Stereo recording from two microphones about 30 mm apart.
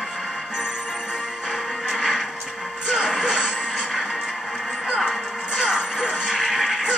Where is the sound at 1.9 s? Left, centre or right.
Centre.